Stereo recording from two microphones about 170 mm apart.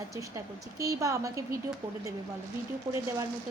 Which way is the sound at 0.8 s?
20° right (ahead or behind).